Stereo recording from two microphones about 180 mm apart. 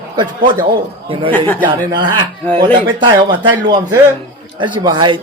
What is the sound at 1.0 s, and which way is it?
Speech, 30° right (ahead or behind).